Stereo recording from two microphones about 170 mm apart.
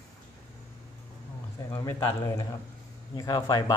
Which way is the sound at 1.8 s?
20° left (ahead or behind).